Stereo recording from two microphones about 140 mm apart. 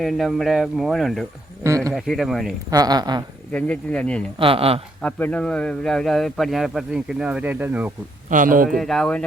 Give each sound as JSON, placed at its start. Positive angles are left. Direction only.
{"t": 0.0, "sound": "speech", "side_deg": 0}
{"t": 1.6, "sound": "a man's voice", "side_deg": -20}
{"t": 1.9, "sound": "speech", "side_deg": 0}
{"t": 2.6, "sound": "speech", "side_deg": -25}
{"t": 3.5, "sound": "speech", "side_deg": 10}
{"t": 4.4, "sound": "speech", "side_deg": -40}
{"t": 5.0, "sound": "speech", "side_deg": 10}
{"t": 8.3, "sound": "a man's voice", "side_deg": -75}
{"t": 8.8, "sound": "speech", "side_deg": 5}